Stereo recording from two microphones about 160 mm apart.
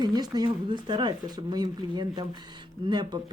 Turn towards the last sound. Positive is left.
turn(degrees=-25)  # may be behind; listen again after turning